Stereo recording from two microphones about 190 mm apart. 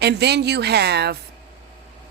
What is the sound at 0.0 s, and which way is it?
Speech, 60° right (ahead or behind).